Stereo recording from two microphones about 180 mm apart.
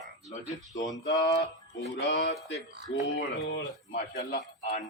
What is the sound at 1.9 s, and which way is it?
Speech, 80° left.